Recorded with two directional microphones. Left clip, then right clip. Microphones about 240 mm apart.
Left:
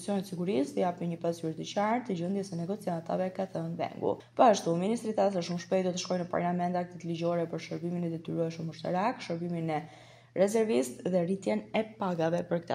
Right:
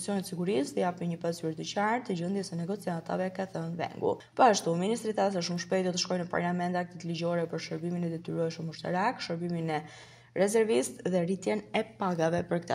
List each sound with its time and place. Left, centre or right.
0.0 s speech: right